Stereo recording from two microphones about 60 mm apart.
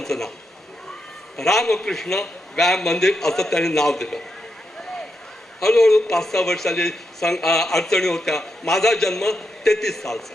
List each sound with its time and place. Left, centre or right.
0.0 s cat: centre
1.4 s a man's voice: centre
5.5 s a man's voice: centre